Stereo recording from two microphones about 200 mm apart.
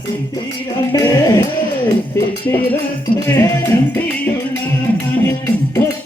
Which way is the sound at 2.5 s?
10° left (ahead or behind).